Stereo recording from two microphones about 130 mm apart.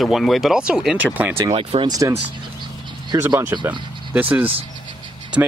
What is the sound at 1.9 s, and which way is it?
Speech, 25° right (ahead or behind).